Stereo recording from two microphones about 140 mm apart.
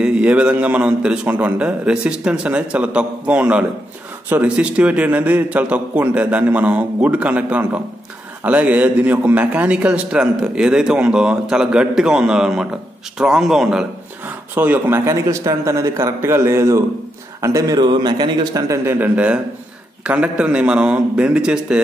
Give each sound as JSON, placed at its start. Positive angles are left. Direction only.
{"t": 0.0, "sound": "a man's voice", "side_deg": -10}
{"t": 18.9, "sound": "a man's voice", "side_deg": -15}